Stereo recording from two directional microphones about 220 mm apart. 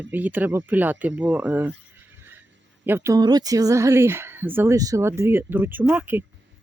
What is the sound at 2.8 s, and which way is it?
Speech, 10° right (ahead or behind).